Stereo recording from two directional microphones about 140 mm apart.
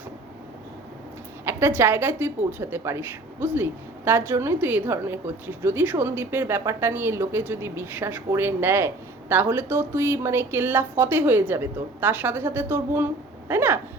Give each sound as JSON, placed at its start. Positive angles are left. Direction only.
{"t": 1.5, "sound": "a woman's voice", "side_deg": -15}